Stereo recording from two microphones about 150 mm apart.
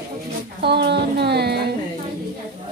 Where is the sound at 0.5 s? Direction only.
90° right.